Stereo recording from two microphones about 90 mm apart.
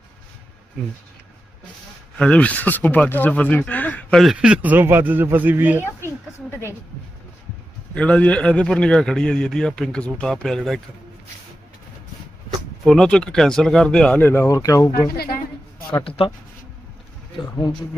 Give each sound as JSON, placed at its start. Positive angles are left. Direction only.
{"t": 2.1, "sound": "a man's voice", "side_deg": 10}
{"t": 4.4, "sound": "a man's voice", "side_deg": -10}
{"t": 7.9, "sound": "a man's voice", "side_deg": 15}
{"t": 12.8, "sound": "a man's voice", "side_deg": 5}
{"t": 14.3, "sound": "speech", "side_deg": 25}
{"t": 14.5, "sound": "speech", "side_deg": 40}
{"t": 16.0, "sound": "speech", "side_deg": 90}